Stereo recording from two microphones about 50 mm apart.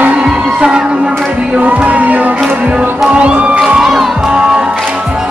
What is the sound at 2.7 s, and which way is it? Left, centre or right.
Speech, centre.